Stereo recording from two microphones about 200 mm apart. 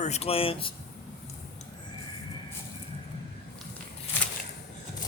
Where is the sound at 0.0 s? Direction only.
30° left (ahead or behind).